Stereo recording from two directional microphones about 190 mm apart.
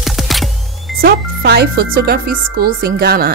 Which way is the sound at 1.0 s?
55° right (ahead or behind).